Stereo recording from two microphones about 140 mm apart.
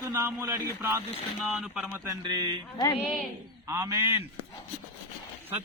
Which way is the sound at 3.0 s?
5° right (ahead or behind).